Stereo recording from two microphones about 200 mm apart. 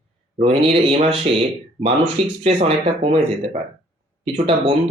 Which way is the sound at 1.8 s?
30° right (ahead or behind).